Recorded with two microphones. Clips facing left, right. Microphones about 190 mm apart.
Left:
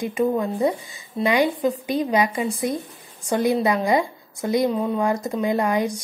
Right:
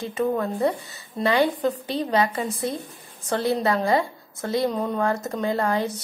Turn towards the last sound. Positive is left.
turn(degrees=15)  # may be behind; listen again after turning